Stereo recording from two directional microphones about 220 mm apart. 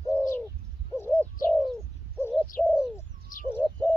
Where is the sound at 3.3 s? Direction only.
35° left (ahead or behind).